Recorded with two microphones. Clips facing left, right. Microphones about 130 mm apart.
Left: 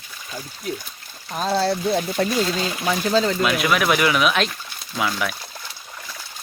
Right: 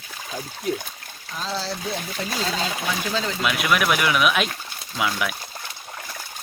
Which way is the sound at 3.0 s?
40° left (ahead or behind).